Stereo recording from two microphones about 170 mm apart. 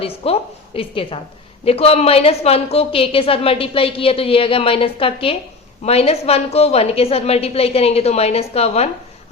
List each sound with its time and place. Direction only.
0.0 s a woman's voice: 35° left (ahead or behind)